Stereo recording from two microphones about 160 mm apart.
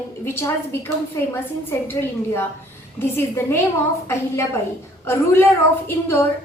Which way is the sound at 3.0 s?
15° left (ahead or behind).